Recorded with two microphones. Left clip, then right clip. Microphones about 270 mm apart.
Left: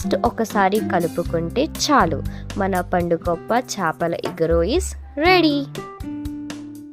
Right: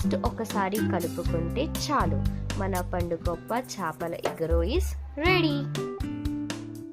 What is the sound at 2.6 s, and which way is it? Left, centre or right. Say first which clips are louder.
Speech: left 10 dB; left.